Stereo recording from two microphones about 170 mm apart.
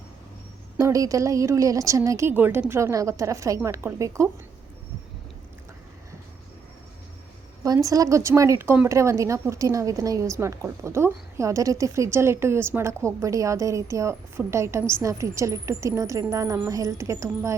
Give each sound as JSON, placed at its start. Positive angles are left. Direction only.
{"t": 0.8, "sound": "speech", "side_deg": -20}
{"t": 7.6, "sound": "speech", "side_deg": -20}